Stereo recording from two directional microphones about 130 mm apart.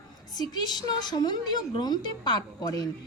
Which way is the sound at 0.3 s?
30° left (ahead or behind).